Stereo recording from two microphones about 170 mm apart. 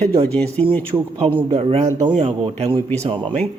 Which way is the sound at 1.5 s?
35° right (ahead or behind).